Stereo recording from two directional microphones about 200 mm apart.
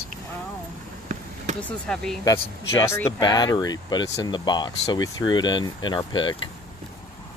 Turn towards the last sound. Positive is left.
turn(degrees=25)  # may be behind; listen again after turning